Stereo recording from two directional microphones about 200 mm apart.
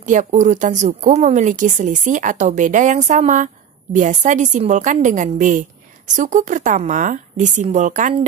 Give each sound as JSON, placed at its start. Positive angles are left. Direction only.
{"t": 0.0, "sound": "a woman's voice", "side_deg": -40}